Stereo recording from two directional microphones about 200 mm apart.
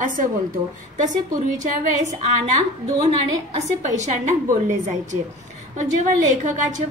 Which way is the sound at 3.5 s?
35° right (ahead or behind).